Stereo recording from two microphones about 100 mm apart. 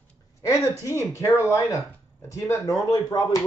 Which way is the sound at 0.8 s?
30° left (ahead or behind).